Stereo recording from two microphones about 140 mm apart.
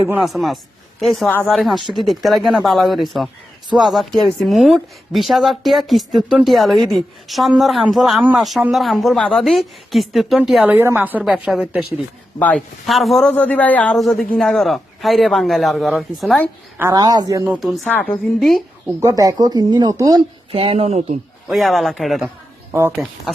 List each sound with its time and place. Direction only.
0.2 s speech: centre (ahead or behind)
12.4 s a man's voice: 10° left (ahead or behind)
12.8 s a man's voice: centre (ahead or behind)
16.9 s speech: 25° right (ahead or behind)
17.8 s a man's voice: 10° left (ahead or behind)
18.9 s speech: 25° right (ahead or behind)
20.5 s speech: 45° right (ahead or behind)
21.5 s speech: centre (ahead or behind)